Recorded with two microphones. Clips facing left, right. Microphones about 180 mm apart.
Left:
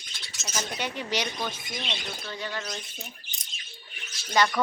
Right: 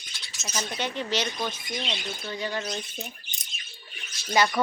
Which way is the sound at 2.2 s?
15° right (ahead or behind).